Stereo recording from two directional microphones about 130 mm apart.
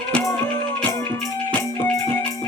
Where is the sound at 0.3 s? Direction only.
15° left (ahead or behind).